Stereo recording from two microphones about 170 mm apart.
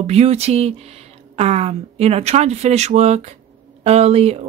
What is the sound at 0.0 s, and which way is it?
Speech, 40° right (ahead or behind).